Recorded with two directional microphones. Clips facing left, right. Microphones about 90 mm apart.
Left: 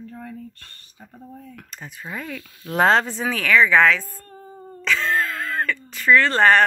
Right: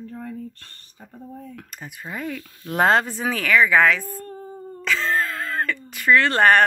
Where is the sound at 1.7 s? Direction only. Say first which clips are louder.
Left 2 dB; 5° right (ahead or behind).